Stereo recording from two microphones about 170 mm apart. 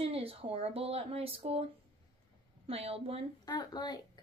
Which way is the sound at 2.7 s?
35° right (ahead or behind).